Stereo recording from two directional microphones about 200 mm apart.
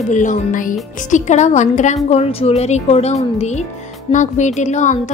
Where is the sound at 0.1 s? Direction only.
40° left (ahead or behind).